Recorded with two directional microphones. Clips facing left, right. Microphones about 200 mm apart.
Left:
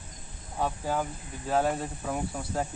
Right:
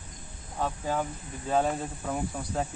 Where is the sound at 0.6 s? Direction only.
5° left (ahead or behind).